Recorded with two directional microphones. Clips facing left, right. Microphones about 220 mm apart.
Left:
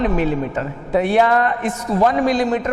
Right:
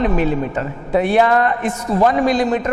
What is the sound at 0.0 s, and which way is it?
A man's voice, 20° right (ahead or behind).